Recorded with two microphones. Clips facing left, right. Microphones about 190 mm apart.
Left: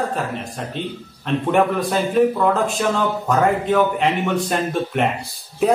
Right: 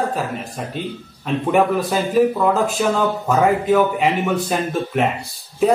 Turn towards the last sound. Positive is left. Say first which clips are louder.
# right 1 dB
turn(degrees=0)  # may be behind; listen again after turning